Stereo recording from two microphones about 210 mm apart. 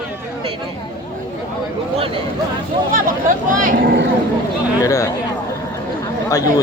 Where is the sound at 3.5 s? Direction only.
40° right (ahead or behind).